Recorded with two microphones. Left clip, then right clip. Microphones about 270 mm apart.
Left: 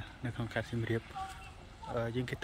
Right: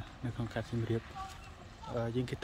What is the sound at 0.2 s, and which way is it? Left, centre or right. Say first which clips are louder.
Speech: left 2 dB; centre.